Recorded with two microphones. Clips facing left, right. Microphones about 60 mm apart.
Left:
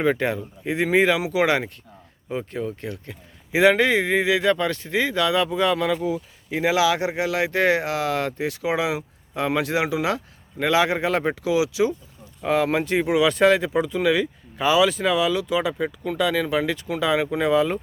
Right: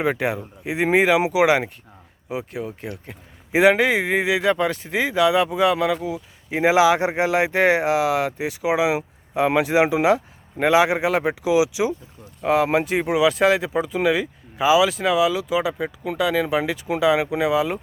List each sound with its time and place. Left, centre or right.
0.0 s speech: centre
6.5 s speech: right